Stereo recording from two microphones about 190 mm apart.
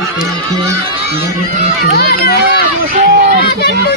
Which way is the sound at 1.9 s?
55° left (ahead or behind).